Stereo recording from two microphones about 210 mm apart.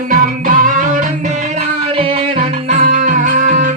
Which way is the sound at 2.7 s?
35° right (ahead or behind).